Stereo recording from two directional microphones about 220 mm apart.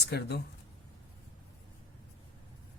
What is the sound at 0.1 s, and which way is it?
Speech, 50° left (ahead or behind).